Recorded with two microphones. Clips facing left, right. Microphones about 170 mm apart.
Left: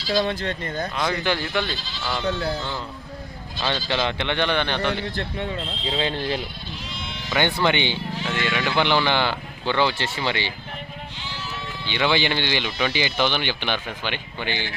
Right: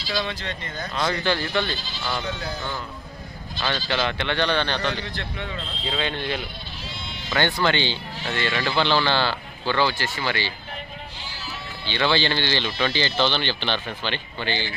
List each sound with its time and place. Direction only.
0.1 s speech: 45° left (ahead or behind)
1.0 s speech: 15° left (ahead or behind)
1.5 s speech: centre (ahead or behind)
3.6 s speech: 20° left (ahead or behind)
5.0 s a man's voice: 40° left (ahead or behind)
5.8 s speech: 20° left (ahead or behind)
6.1 s a man's voice: 35° left (ahead or behind)
7.3 s speech: 20° left (ahead or behind)